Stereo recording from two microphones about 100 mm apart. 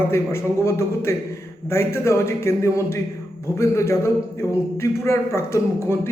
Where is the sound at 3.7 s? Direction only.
30° left (ahead or behind).